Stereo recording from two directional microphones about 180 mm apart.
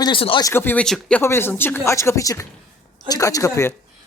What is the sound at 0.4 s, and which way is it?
Speech, 10° left (ahead or behind).